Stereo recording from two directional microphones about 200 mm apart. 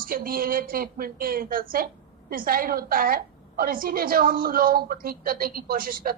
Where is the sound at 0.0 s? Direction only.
45° right (ahead or behind).